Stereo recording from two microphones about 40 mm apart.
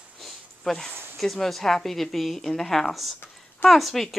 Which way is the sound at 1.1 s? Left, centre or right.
Centre.